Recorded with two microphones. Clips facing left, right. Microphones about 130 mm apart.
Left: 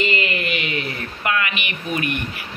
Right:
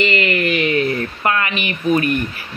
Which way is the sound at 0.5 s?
45° right (ahead or behind).